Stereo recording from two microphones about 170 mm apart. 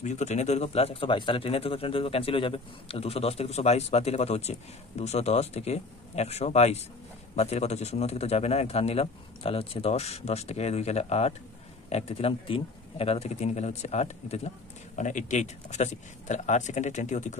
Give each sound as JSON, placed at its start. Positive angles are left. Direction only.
{"t": 0.0, "sound": "a man's voice", "side_deg": 45}